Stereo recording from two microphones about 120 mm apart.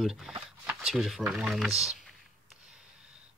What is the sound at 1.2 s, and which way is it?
Speech, 5° right (ahead or behind).